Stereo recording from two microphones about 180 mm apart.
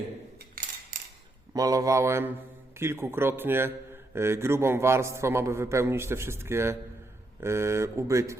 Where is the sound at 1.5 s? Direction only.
20° right (ahead or behind).